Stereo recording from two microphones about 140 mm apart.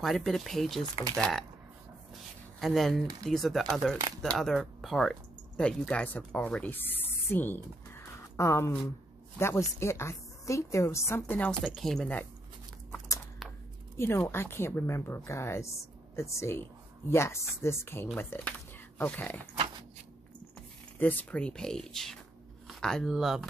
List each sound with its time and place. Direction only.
0.0 s speech: centre (ahead or behind)
2.6 s a woman's voice: centre (ahead or behind)
13.4 s a sound: centre (ahead or behind)
13.9 s a woman's voice: 15° left (ahead or behind)
21.0 s speech: 10° left (ahead or behind)